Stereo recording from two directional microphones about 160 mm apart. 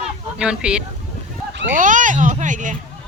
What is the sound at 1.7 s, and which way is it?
Speech, 55° right (ahead or behind).